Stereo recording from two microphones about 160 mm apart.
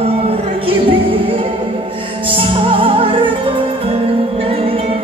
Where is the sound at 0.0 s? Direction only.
35° right (ahead or behind).